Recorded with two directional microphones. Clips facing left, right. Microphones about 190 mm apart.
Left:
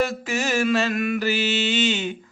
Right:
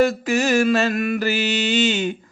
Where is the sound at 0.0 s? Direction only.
45° right (ahead or behind).